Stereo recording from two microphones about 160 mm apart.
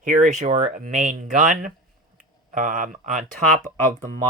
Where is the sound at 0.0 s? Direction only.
55° right (ahead or behind).